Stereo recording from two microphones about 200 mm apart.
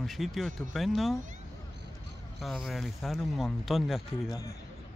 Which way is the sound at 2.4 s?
Centre (ahead or behind).